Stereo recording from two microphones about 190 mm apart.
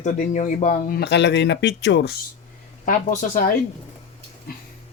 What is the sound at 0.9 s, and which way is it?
Speech, 65° left (ahead or behind).